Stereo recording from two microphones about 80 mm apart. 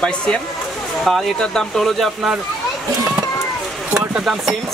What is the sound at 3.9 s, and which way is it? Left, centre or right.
Speech, centre.